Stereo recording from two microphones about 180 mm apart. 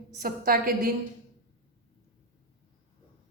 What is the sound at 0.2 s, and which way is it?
Speech, 55° right (ahead or behind).